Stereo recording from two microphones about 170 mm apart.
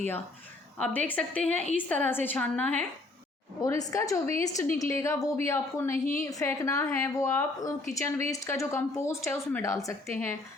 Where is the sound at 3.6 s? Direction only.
20° left (ahead or behind).